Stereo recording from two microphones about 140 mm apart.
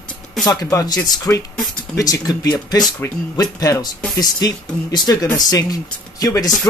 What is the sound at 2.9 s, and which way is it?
Speech, 15° left (ahead or behind).